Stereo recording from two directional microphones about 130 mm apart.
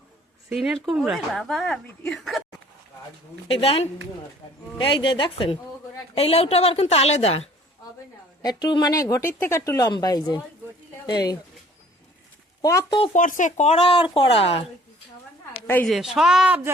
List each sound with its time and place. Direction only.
0.5 s speech: 5° right (ahead or behind)
3.5 s a woman's voice: 50° left (ahead or behind)
8.4 s speech: 30° left (ahead or behind)
12.6 s speech: 25° left (ahead or behind)
13.1 s speech: 85° left
13.7 s a woman's voice: 40° left (ahead or behind)
15.6 s a woman's voice: 15° left (ahead or behind)
15.9 s speech: centre (ahead or behind)